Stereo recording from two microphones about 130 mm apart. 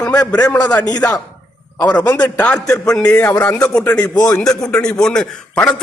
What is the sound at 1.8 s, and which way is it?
A man's voice, 10° left (ahead or behind).